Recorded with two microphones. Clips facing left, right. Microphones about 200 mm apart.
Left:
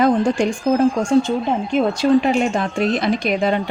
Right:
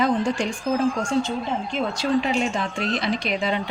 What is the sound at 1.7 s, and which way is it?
Speech, 55° left (ahead or behind).